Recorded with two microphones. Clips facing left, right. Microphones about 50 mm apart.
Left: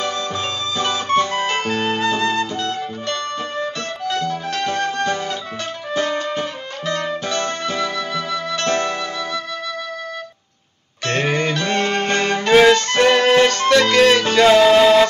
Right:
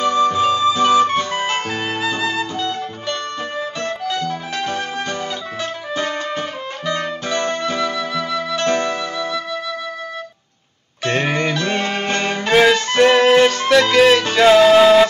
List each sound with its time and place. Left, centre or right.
0.0 s music: right; by 5.1 s centre
6.1 s music: centre
7.2 s music: centre
7.6 s music: centre
11.1 s music: centre